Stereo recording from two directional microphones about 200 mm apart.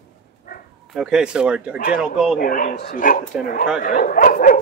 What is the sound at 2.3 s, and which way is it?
Speech, 45° left (ahead or behind).